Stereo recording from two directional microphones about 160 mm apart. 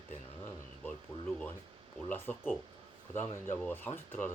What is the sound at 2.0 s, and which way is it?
Speech, 15° left (ahead or behind).